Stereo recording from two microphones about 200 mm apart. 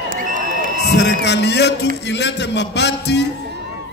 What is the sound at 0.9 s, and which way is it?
A man's voice, 60° left (ahead or behind).